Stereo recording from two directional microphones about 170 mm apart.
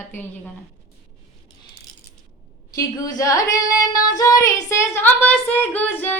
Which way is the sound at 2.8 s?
20° left (ahead or behind).